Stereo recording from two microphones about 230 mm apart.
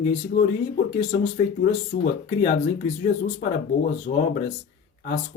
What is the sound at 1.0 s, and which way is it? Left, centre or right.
Speech, left.